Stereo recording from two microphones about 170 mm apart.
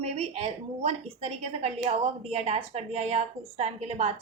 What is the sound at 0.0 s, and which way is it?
Speech, 40° right (ahead or behind).